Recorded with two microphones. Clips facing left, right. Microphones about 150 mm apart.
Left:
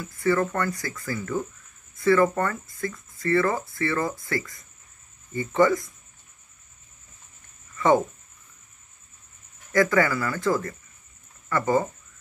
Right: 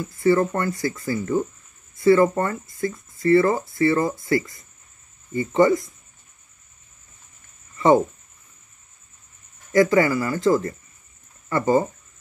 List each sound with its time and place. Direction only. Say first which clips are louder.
0.0 s speech: right 5 dB; 25° right (ahead or behind)
7.7 s a sound: right 4 dB; 25° right (ahead or behind)
9.7 s speech: right 4 dB; 25° right (ahead or behind)